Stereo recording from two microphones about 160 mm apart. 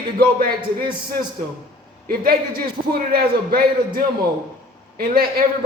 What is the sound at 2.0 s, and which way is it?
A man's voice, 65° right (ahead or behind).